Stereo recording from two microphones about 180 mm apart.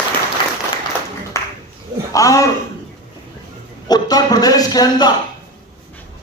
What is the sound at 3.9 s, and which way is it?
Speech, 20° left (ahead or behind).